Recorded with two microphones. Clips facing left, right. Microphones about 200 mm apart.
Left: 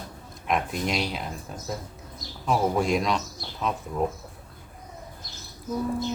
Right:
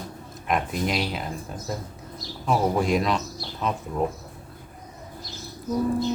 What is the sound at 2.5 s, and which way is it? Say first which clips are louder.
Speech: right 1 dB; centre (ahead or behind).